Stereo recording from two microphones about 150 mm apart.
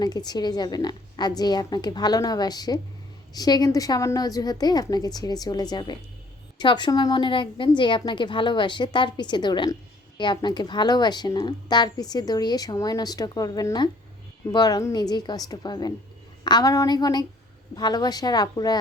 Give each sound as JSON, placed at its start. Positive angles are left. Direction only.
{"t": 0.0, "sound": "a woman's voice", "side_deg": 25}